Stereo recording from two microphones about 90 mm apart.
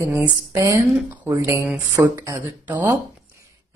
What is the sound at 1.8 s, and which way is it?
Speech, 40° right (ahead or behind).